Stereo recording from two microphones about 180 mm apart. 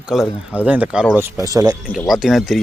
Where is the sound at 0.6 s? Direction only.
5° right (ahead or behind).